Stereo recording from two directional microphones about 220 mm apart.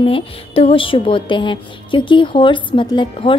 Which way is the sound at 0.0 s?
25° left (ahead or behind).